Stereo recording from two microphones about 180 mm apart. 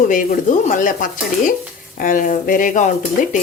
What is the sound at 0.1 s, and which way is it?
Speech, 45° left (ahead or behind).